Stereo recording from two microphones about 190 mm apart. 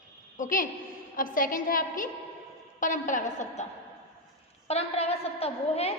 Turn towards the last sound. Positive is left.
turn(degrees=30)  # may be behind; listen again after turning